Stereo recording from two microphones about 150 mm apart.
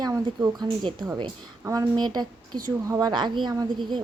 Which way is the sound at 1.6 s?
25° right (ahead or behind).